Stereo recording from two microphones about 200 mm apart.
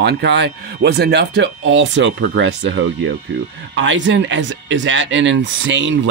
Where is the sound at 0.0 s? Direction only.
60° right (ahead or behind).